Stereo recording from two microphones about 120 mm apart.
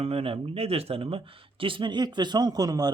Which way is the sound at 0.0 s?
55° right (ahead or behind).